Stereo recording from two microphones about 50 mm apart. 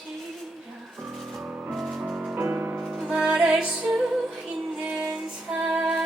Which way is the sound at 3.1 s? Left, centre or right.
Centre.